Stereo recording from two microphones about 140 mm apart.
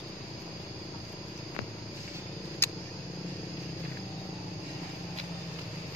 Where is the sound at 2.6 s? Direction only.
15° left (ahead or behind).